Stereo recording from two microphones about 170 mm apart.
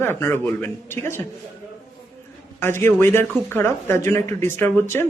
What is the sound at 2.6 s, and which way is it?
Speech, 15° left (ahead or behind).